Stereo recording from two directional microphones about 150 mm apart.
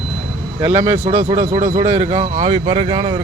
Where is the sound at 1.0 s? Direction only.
40° right (ahead or behind).